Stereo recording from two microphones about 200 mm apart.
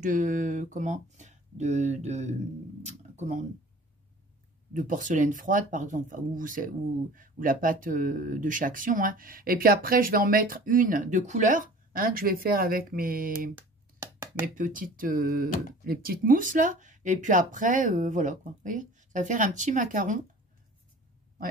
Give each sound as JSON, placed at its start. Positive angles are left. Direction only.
{"t": 0.0, "sound": "speech", "side_deg": -40}
{"t": 4.7, "sound": "speech", "side_deg": -40}
{"t": 13.6, "sound": "a sound", "side_deg": -10}
{"t": 14.4, "sound": "speech", "side_deg": -40}